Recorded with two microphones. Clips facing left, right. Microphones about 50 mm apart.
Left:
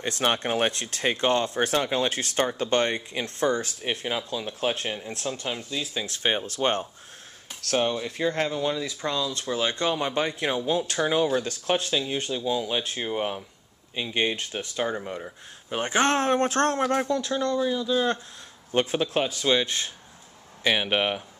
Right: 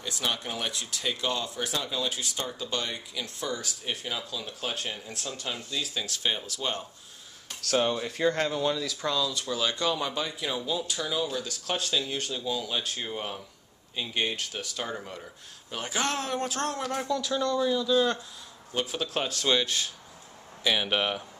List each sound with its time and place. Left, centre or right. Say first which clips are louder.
0.0 s speech: left 6 dB; left
6.0 s speech: left 4 dB; left
7.9 s speech: even; centre
8.7 s speech: left 1 dB; left
11.7 s speech: left 4 dB; left
15.8 s speech: left 7 dB; left
17.6 s speech: right 3 dB; left
18.7 s speech: left 7 dB; left
18.9 s speech: left 5 dB; centre
20.8 s speech: left 3 dB; left